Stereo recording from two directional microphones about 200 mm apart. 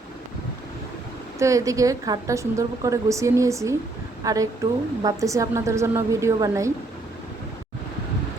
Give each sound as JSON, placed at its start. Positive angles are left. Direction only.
{"t": 1.4, "sound": "a woman's voice", "side_deg": -15}